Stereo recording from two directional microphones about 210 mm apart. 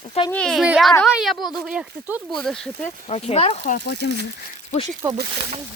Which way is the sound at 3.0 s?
30° left (ahead or behind).